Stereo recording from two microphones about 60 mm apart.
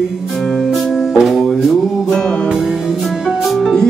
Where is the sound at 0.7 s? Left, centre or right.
Centre.